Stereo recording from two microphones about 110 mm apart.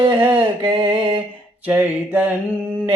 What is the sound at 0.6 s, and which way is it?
Mantra, 45° right (ahead or behind).